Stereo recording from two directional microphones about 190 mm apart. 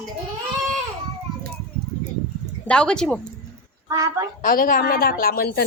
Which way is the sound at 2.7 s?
5° left (ahead or behind).